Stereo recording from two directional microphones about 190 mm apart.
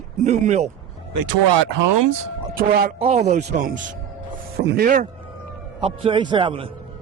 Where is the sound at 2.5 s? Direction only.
50° right (ahead or behind).